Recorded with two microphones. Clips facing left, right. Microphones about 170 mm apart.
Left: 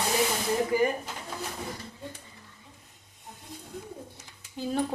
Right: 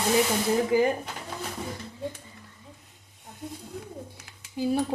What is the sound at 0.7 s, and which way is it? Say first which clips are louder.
Speech: right 2 dB; 25° right (ahead or behind).